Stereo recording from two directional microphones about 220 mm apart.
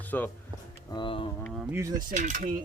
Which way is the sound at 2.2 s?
35° right (ahead or behind).